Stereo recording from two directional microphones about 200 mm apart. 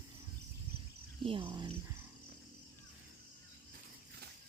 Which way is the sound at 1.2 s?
25° right (ahead or behind).